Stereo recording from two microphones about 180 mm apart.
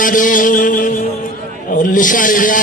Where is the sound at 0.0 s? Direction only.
50° left (ahead or behind).